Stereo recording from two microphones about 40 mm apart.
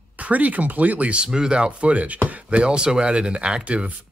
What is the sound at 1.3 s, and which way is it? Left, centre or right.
Speech, right.